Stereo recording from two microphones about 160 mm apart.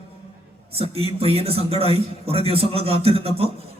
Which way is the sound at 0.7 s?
40° right (ahead or behind).